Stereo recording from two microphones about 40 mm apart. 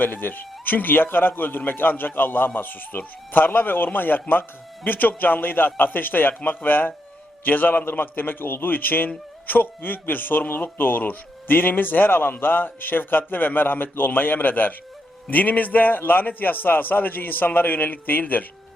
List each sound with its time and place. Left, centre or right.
0.0 s a man's voice: left